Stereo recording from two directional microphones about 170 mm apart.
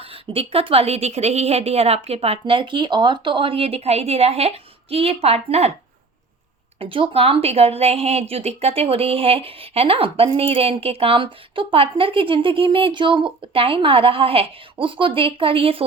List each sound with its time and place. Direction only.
0.0 s a woman's voice: 35° right (ahead or behind)
6.7 s a woman's voice: 30° right (ahead or behind)